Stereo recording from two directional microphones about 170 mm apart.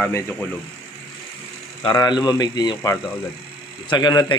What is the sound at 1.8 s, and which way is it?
A man's voice, 25° left (ahead or behind).